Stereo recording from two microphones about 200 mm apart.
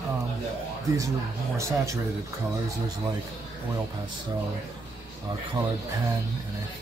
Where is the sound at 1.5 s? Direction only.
15° right (ahead or behind).